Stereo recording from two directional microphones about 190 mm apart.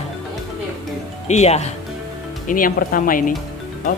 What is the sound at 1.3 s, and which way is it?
Speech, 35° left (ahead or behind).